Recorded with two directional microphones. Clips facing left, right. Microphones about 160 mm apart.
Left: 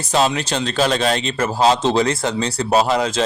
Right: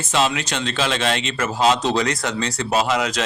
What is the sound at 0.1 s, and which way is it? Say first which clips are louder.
A man's voice: left 3 dB; 35° left (ahead or behind).